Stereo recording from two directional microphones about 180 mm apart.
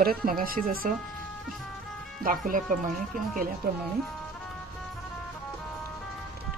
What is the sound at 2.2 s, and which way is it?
Speech, 50° right (ahead or behind).